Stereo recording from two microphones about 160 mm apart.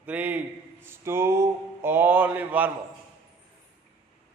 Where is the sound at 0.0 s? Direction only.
10° right (ahead or behind).